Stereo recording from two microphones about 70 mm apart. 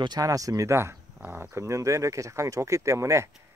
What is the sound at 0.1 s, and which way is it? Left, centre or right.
Speech, right.